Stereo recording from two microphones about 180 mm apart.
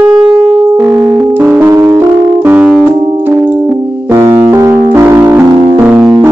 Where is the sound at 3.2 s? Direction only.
10° right (ahead or behind).